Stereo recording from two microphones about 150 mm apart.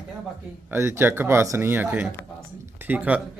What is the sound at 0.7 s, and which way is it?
Speech, 15° right (ahead or behind).